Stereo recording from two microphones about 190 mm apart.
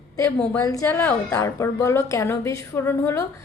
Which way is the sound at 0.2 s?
15° left (ahead or behind).